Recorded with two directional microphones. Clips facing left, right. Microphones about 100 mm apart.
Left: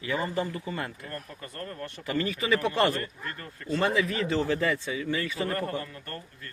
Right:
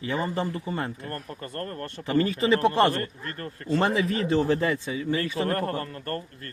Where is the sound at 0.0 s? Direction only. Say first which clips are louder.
Right 2 dB; 30° right (ahead or behind).